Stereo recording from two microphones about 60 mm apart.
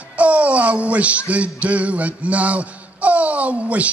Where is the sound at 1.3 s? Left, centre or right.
Right.